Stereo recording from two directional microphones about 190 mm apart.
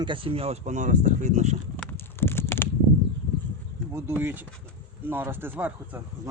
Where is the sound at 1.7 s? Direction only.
10° left (ahead or behind).